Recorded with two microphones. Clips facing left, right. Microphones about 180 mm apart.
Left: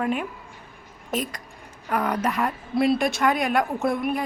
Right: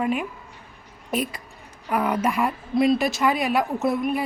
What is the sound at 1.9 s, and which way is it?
Speech, 10° right (ahead or behind).